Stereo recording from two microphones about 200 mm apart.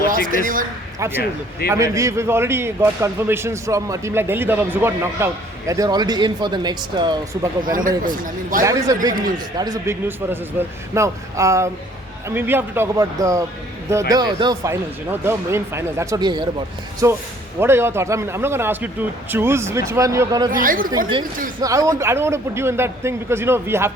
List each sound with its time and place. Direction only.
0.1 s a woman's voice: 45° right (ahead or behind)
0.9 s speech: 15° right (ahead or behind)
7.9 s a man's voice: 45° right (ahead or behind)
8.6 s speech: 15° right (ahead or behind)
20.5 s a man's voice: 45° right (ahead or behind)
21.6 s speech: 15° right (ahead or behind)